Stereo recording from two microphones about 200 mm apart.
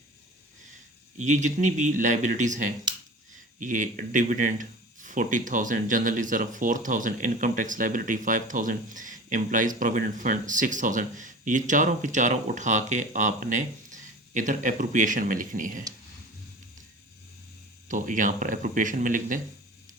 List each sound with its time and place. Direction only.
1.2 s speech: 35° right (ahead or behind)
17.8 s speech: 40° right (ahead or behind)